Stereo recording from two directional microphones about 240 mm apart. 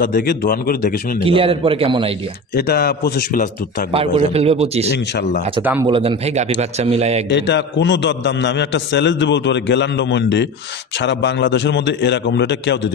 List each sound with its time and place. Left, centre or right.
0.0 s a man's voice: left
1.2 s a man's voice: right
2.5 s a man's voice: left
3.9 s a man's voice: right
4.9 s a man's voice: left
5.6 s speech: centre
5.9 s a man's voice: right
7.2 s a man's voice: left